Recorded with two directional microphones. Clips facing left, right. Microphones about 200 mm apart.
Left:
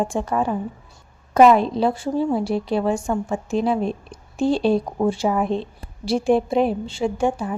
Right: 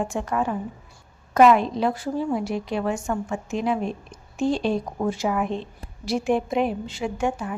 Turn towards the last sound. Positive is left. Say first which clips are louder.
# left 4 dB
turn(degrees=30)  # may be behind; listen again after turning